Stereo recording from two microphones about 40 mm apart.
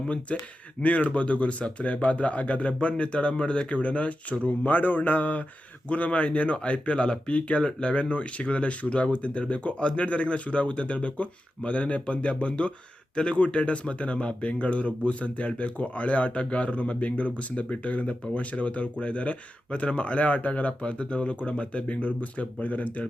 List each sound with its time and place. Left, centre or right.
0.3 s speech: left